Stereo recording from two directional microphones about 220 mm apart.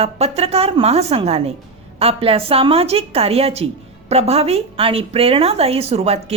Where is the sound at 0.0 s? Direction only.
30° right (ahead or behind).